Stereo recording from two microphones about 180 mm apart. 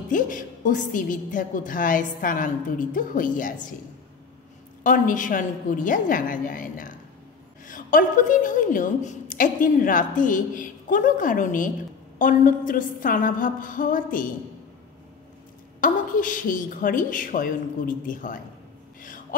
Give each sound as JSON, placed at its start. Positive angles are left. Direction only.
{"t": 0.1, "sound": "a woman's voice", "side_deg": 45}
{"t": 4.8, "sound": "a woman's voice", "side_deg": 50}
{"t": 15.8, "sound": "a woman's voice", "side_deg": 50}